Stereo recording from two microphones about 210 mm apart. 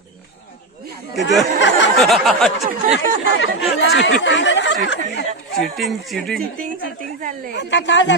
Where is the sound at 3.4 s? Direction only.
60° left (ahead or behind).